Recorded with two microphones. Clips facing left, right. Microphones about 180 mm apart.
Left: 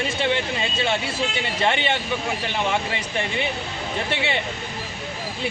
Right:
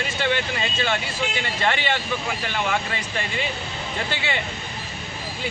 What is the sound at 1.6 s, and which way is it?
Speech, 25° left (ahead or behind).